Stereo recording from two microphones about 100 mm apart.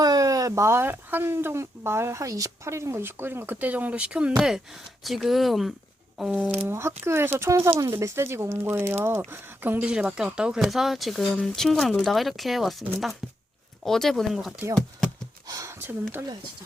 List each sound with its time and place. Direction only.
0.0 s speech: 40° right (ahead or behind); by 6.4 s 5° right (ahead or behind)
6.7 s speech: 25° right (ahead or behind); by 14.6 s 5° right (ahead or behind)
15.4 s a sound: 30° right (ahead or behind)